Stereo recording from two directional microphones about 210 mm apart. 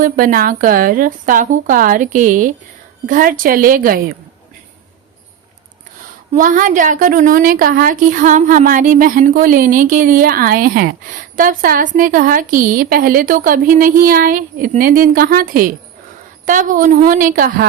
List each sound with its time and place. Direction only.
0.0 s a woman's voice: 40° right (ahead or behind)
6.3 s a woman's voice: 40° right (ahead or behind)